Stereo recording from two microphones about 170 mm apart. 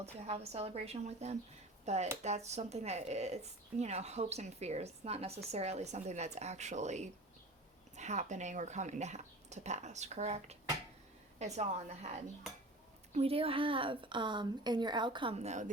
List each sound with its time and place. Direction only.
0.0 s speech: 40° right (ahead or behind)